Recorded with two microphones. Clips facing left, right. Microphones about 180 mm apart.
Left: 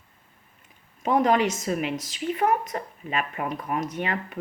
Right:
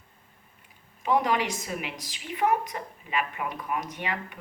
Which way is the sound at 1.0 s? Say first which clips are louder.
Left 4 dB; 45° left (ahead or behind).